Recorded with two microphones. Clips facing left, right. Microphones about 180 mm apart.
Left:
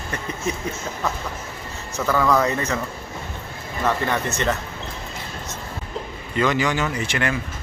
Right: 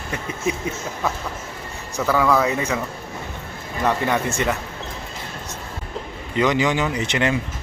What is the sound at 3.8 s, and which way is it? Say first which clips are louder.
Speech: right 2 dB; 15° right (ahead or behind).